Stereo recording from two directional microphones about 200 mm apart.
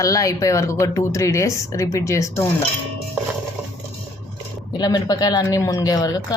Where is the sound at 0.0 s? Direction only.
15° left (ahead or behind).